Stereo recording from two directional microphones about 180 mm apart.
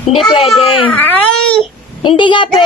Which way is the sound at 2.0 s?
25° left (ahead or behind).